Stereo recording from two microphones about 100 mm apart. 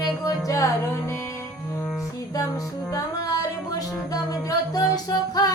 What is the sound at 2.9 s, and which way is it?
Music, 35° left (ahead or behind).